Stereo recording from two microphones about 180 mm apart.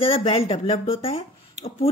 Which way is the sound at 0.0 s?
30° left (ahead or behind).